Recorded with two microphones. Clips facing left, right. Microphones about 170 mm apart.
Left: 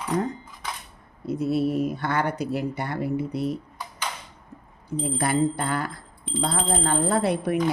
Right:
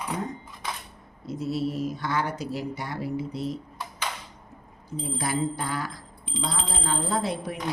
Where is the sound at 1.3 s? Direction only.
60° left (ahead or behind).